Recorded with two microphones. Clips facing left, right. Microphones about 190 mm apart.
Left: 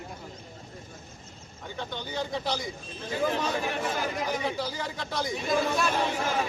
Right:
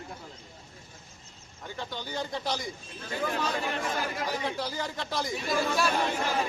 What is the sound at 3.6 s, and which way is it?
Speech, 5° left (ahead or behind).